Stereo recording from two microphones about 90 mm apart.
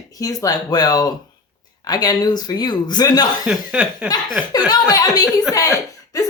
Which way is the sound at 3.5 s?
10° right (ahead or behind).